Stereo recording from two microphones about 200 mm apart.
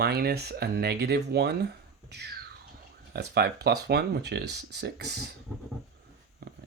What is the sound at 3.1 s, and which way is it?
Speech, 55° right (ahead or behind).